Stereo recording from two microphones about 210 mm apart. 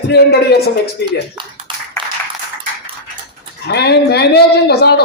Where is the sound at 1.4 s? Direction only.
20° right (ahead or behind).